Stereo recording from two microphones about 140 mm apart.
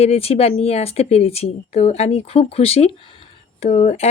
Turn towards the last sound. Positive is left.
turn(degrees=50)  # may be behind; listen again after turning